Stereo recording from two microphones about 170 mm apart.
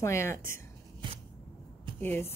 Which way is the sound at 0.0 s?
15° left (ahead or behind).